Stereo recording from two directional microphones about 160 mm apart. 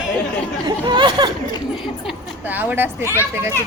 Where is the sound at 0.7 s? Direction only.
30° right (ahead or behind).